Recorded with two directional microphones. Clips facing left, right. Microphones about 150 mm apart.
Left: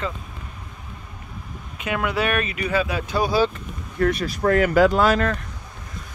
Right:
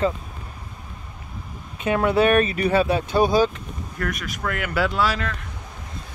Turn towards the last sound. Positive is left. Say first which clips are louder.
# left 5 dB
turn(degrees=45)  # may be behind; listen again after turning